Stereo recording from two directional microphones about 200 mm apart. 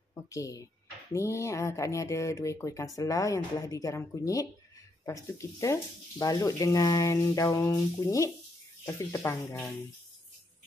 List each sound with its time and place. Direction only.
0.1 s speech: 15° left (ahead or behind)